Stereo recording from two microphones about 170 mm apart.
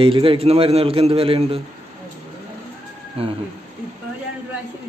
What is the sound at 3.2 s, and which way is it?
Speech, 35° right (ahead or behind).